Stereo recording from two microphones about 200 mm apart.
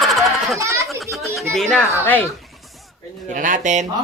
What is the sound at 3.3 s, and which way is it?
Speech, 40° right (ahead or behind).